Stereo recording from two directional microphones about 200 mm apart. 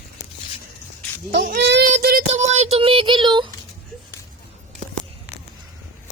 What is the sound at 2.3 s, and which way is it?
Child singing, 30° right (ahead or behind).